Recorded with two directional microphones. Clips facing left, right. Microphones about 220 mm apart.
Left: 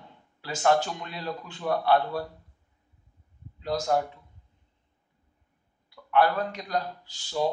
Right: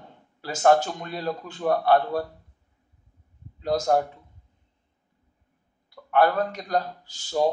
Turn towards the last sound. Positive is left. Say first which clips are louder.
# right 4 dB
turn(degrees=-45)  # may be behind; listen again after turning